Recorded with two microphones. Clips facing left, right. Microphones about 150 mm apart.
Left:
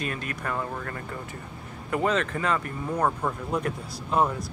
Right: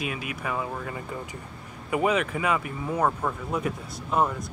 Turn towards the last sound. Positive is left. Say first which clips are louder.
# left 1 dB
turn(degrees=0)  # may be behind; listen again after turning